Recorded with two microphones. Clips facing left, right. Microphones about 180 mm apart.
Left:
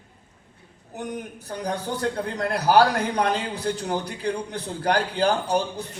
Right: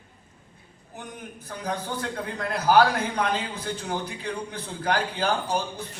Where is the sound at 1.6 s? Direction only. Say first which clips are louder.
Left 4 dB; 40° left (ahead or behind).